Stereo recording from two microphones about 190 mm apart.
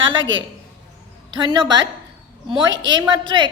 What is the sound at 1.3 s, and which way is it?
A woman's voice, 20° right (ahead or behind).